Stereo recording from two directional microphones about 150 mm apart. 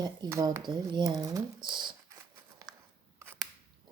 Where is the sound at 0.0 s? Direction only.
25° right (ahead or behind).